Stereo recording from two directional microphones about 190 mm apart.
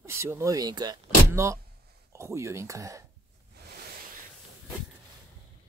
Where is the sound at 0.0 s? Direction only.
15° right (ahead or behind).